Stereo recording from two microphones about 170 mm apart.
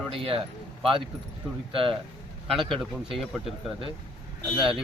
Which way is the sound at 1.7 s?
35° right (ahead or behind).